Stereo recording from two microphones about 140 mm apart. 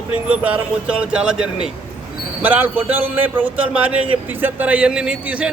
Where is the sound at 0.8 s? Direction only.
5° right (ahead or behind).